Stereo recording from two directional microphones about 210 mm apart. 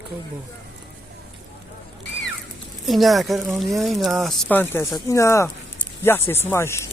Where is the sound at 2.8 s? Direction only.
Centre (ahead or behind).